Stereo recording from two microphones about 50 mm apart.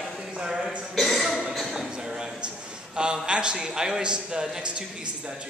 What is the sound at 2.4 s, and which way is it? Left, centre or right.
A man's voice, centre.